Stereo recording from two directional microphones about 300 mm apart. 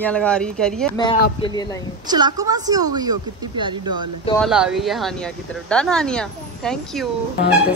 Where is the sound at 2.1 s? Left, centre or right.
Centre.